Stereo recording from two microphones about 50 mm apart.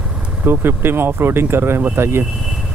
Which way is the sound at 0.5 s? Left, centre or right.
Right.